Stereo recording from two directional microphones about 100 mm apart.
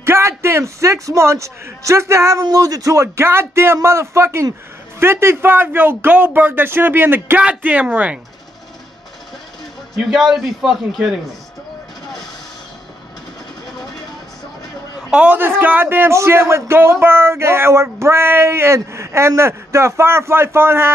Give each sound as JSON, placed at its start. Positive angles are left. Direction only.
{"t": 0.0, "sound": "a man's voice", "side_deg": -25}
{"t": 9.9, "sound": "a man's voice", "side_deg": -5}
{"t": 15.0, "sound": "a man's voice", "side_deg": -10}